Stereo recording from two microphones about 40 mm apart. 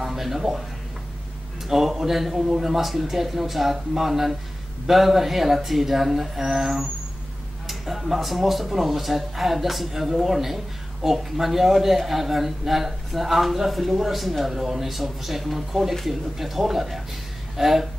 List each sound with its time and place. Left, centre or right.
0.0 s speech: centre
1.7 s speech: centre